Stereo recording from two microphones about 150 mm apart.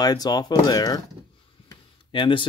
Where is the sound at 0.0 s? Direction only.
25° left (ahead or behind).